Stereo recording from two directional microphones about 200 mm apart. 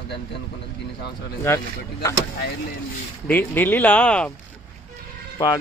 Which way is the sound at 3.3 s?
10° left (ahead or behind).